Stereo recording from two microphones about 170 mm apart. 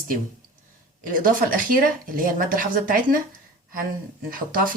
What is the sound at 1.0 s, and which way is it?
Speech, 55° right (ahead or behind).